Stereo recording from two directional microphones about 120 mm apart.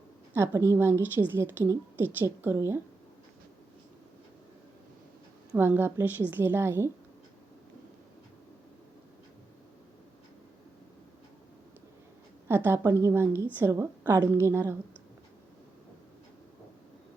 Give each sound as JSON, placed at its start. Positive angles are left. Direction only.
{"t": 0.3, "sound": "a woman's voice", "side_deg": -25}
{"t": 5.5, "sound": "a woman's voice", "side_deg": -15}
{"t": 12.5, "sound": "a woman's voice", "side_deg": -20}